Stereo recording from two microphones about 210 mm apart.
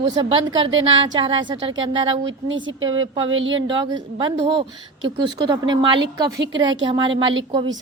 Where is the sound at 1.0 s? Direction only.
20° right (ahead or behind).